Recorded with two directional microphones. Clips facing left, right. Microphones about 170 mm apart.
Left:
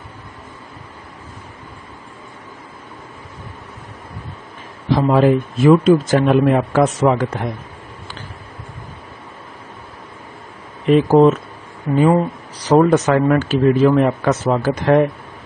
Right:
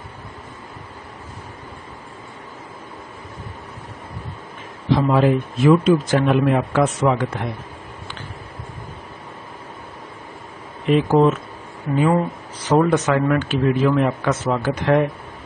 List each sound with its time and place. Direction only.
4.9 s speech: 45° left (ahead or behind)
11.1 s speech: 35° left (ahead or behind)